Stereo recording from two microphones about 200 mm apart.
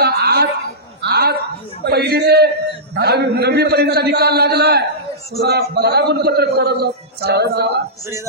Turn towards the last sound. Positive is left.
turn(degrees=-55)  # may be behind; listen again after turning